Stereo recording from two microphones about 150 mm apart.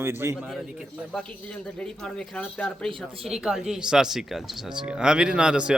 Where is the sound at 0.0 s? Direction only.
15° right (ahead or behind).